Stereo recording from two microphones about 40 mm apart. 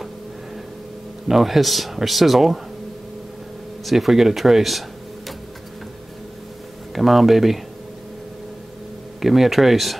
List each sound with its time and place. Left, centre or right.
1.2 s speech: centre
3.8 s speech: centre
7.0 s speech: centre
9.2 s speech: centre